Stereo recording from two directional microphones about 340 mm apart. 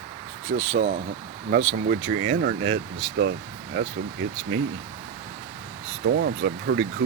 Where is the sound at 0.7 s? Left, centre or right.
Right.